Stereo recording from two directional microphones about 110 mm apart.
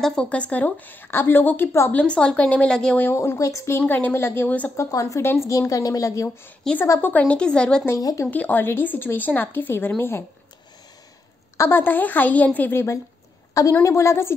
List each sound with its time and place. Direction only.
0.0 s a woman's voice: 10° left (ahead or behind)
3.0 s speech: 20° left (ahead or behind)
3.8 s a woman's voice: 15° left (ahead or behind)
4.7 s speech: 30° left (ahead or behind)
6.8 s a woman's voice: 20° left (ahead or behind)
7.8 s speech: 30° left (ahead or behind)
8.3 s speech: 15° left (ahead or behind)
11.5 s a woman's voice: 20° left (ahead or behind)